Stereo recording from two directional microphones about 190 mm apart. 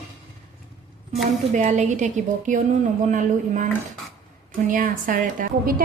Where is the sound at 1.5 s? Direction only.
40° right (ahead or behind).